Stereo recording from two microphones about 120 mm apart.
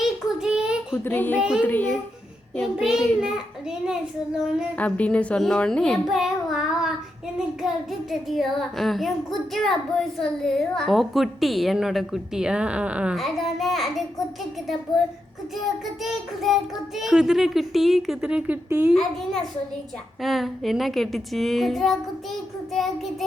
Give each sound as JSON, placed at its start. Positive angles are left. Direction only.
{"t": 0.0, "sound": "child singing", "side_deg": -5}
{"t": 1.0, "sound": "a woman's voice", "side_deg": 15}
{"t": 1.4, "sound": "a child's voice", "side_deg": -5}
{"t": 1.6, "sound": "a woman's voice", "side_deg": 15}
{"t": 2.7, "sound": "speech", "side_deg": -5}
{"t": 4.8, "sound": "a woman's voice", "side_deg": 10}
{"t": 6.1, "sound": "child singing", "side_deg": 0}
{"t": 8.3, "sound": "speech", "side_deg": 0}
{"t": 16.0, "sound": "speech", "side_deg": 0}
{"t": 18.9, "sound": "speech", "side_deg": 0}